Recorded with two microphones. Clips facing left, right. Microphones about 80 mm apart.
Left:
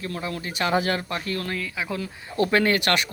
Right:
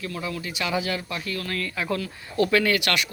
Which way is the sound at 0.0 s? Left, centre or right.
Left.